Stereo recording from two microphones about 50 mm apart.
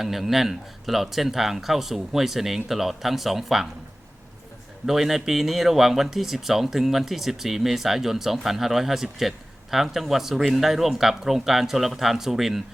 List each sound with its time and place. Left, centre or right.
0.0 s speech: centre
4.9 s speech: centre